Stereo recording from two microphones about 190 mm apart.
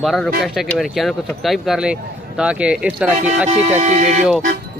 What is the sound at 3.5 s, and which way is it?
Speech, 35° right (ahead or behind).